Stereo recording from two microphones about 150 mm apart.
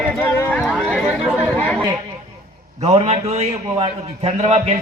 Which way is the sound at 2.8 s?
45° right (ahead or behind).